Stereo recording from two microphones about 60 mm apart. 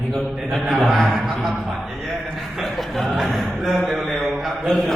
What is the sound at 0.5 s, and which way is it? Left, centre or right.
A man's voice, centre.